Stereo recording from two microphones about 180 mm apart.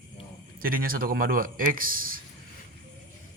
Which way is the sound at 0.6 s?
55° right (ahead or behind).